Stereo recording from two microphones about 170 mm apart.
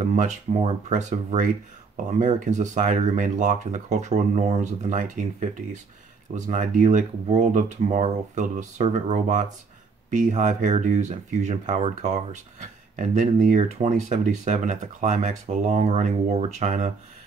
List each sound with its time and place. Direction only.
0.1 s speech: 45° right (ahead or behind)